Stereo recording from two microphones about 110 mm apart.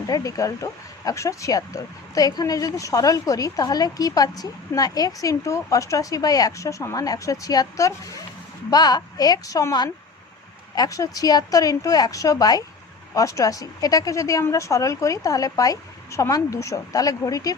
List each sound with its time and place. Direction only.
0.1 s speech: 30° left (ahead or behind)